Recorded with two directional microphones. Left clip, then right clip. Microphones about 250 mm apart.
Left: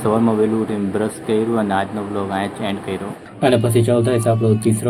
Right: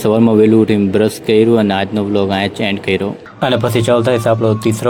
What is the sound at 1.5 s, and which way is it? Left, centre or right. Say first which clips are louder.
Speech: right 5 dB; right.